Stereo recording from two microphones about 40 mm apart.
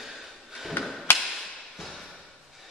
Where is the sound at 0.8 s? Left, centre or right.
Left.